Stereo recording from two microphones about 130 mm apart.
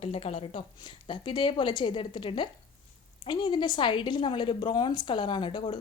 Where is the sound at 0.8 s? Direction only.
35° left (ahead or behind).